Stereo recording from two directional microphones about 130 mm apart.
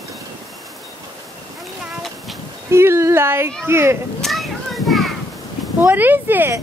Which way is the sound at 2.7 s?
20° right (ahead or behind).